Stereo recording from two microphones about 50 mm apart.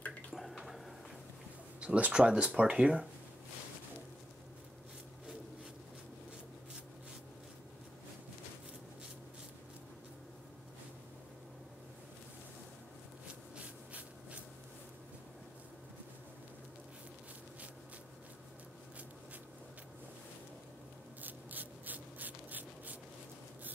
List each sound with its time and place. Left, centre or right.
0.3 s drip: centre
1.8 s speech: right
21.2 s writing: right